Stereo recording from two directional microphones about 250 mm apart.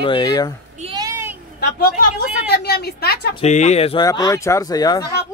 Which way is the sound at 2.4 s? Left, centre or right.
Left.